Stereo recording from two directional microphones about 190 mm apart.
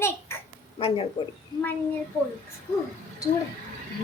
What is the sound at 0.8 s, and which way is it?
Speech, 30° left (ahead or behind).